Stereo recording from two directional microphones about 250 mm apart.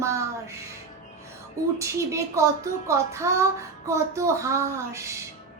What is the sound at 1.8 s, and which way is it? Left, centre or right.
Child singing, centre.